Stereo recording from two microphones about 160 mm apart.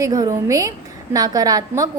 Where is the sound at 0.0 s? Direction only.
20° right (ahead or behind).